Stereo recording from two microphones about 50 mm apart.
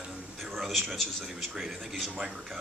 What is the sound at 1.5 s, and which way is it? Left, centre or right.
Speech, centre.